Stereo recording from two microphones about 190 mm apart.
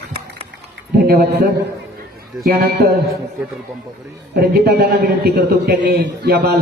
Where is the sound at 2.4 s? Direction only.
55° right (ahead or behind).